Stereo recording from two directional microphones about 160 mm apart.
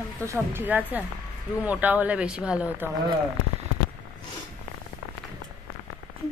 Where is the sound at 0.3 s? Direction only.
15° right (ahead or behind).